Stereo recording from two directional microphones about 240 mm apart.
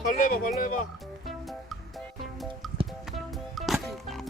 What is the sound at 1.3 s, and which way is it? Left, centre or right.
Music, centre.